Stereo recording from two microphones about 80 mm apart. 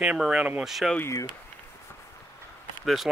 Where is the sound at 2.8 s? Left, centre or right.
Centre.